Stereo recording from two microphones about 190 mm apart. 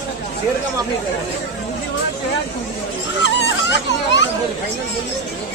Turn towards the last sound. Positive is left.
turn(degrees=70)  # may be behind; listen again after turning